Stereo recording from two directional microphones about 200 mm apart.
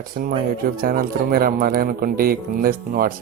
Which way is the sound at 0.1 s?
50° right (ahead or behind).